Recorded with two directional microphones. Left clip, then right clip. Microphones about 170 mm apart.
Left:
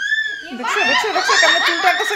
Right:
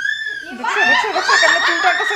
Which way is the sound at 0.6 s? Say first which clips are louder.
Right 2 dB; 45° left (ahead or behind).